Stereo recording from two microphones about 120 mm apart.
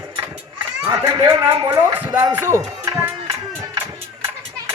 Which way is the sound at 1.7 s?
20° right (ahead or behind).